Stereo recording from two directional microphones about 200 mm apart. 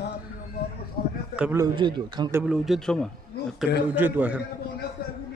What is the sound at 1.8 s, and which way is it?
Speech, 20° right (ahead or behind).